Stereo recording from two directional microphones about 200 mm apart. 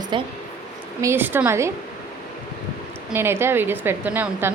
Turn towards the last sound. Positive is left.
turn(degrees=-10)  # may be behind; listen again after turning